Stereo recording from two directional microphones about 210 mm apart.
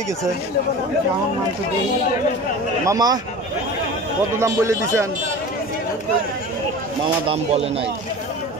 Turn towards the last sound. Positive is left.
turn(degrees=-30)  # may be behind; listen again after turning